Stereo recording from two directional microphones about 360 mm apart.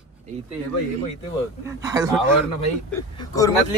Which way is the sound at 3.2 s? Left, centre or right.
Centre.